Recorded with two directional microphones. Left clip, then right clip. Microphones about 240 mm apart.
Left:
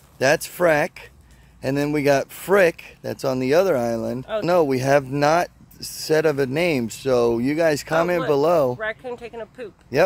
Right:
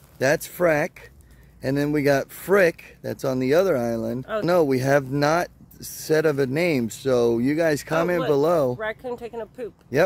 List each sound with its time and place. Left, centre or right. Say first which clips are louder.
0.2 s speech: left 2 dB; centre
8.7 s speech: left 1 dB; centre
9.9 s speech: left 2 dB; centre